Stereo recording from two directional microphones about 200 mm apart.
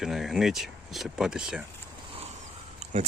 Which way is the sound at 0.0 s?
Centre (ahead or behind).